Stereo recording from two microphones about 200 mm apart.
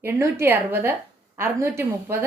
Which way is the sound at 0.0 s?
10° right (ahead or behind).